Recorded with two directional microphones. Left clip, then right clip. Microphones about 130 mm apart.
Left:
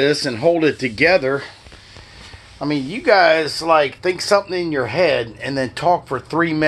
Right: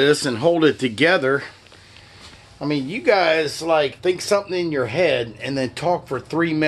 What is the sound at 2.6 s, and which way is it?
Speech, 5° right (ahead or behind).